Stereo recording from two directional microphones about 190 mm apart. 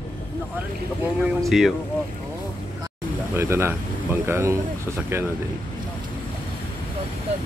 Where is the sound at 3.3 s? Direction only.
15° right (ahead or behind).